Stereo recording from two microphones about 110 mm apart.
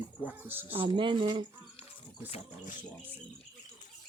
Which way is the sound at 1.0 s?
50° right (ahead or behind).